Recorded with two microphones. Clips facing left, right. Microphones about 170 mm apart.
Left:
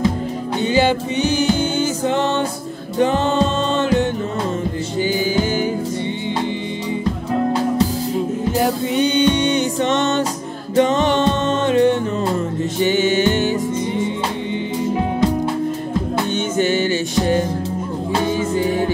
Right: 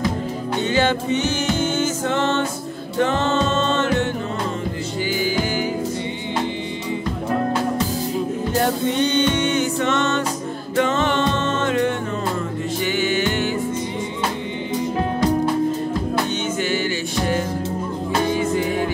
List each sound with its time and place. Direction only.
0.7 s music: 15° left (ahead or behind)
8.5 s music: 10° left (ahead or behind)
16.5 s music: 25° left (ahead or behind)